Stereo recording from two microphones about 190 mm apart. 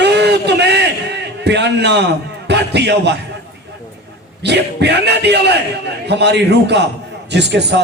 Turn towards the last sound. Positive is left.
turn(degrees=-65)  # may be behind; listen again after turning